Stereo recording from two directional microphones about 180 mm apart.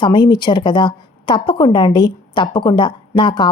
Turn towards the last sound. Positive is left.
turn(degrees=25)  # may be behind; listen again after turning